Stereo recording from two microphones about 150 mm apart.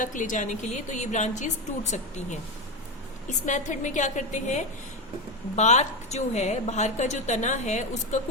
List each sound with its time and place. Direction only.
0.0 s a woman's voice: 60° left (ahead or behind)